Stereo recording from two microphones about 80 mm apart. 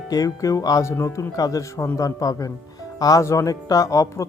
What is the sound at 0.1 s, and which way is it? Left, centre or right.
Speech, left.